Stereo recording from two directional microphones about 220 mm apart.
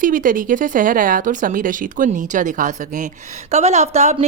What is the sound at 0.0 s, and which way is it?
Speech, 40° right (ahead or behind).